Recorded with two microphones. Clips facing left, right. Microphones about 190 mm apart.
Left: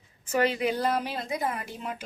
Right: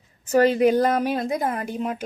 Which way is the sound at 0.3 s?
40° right (ahead or behind).